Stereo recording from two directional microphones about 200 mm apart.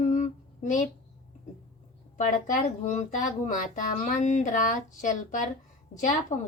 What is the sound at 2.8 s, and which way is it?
A woman's voice, 35° left (ahead or behind).